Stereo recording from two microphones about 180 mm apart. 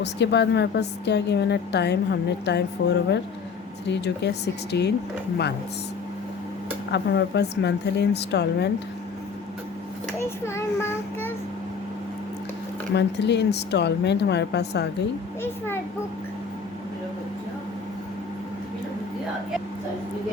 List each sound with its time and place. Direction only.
0.0 s a woman's voice: 70° left (ahead or behind)
6.9 s a woman's voice: 70° left (ahead or behind)
10.2 s a child's voice: 15° left (ahead or behind)
12.9 s a woman's voice: 70° left (ahead or behind)
15.4 s a child's voice: 10° left (ahead or behind)